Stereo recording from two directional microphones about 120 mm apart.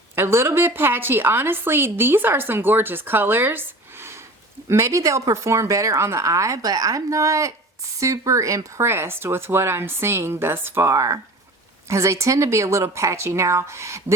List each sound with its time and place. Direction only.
0.2 s a woman's voice: 20° right (ahead or behind)